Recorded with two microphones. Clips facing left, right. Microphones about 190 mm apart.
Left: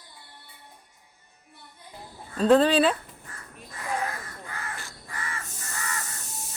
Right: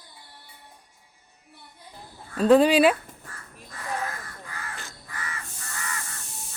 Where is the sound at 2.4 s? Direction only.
10° right (ahead or behind).